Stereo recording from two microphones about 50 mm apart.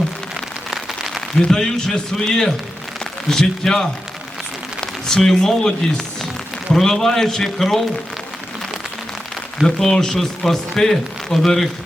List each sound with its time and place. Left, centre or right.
0.7 s rain on surface: centre
1.4 s a man's voice: centre
6.7 s speech: centre
9.6 s speech: centre